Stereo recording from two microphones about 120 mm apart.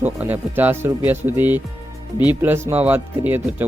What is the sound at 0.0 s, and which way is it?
Speech, 15° right (ahead or behind).